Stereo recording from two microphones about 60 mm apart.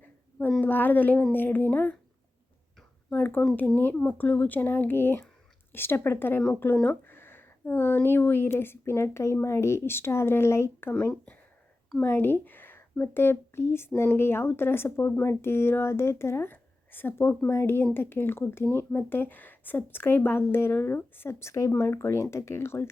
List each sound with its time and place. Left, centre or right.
0.6 s speech: left
3.1 s speech: left
12.0 s speech: left